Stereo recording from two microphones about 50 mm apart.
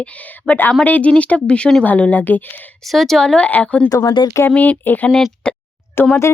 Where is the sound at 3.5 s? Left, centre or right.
Left.